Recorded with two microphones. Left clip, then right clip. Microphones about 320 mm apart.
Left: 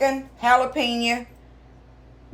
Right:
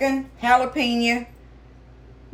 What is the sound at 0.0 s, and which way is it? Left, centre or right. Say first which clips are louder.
Speech: left 1 dB; centre.